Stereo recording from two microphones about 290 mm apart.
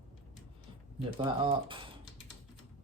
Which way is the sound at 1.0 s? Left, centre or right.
Centre.